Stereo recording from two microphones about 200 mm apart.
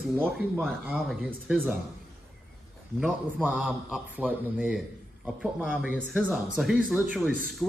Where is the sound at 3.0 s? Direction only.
5° right (ahead or behind).